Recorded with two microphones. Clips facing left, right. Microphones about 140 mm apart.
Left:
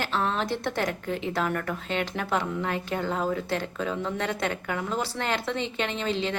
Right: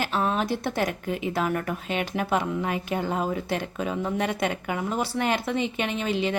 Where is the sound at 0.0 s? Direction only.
10° right (ahead or behind).